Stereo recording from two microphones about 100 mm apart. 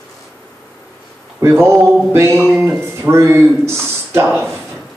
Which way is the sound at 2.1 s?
25° right (ahead or behind).